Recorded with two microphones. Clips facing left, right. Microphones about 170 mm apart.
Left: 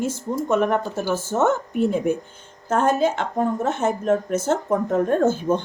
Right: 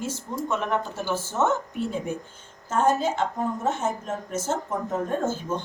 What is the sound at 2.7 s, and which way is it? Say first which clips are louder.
Speech: left 3 dB; 70° left (ahead or behind).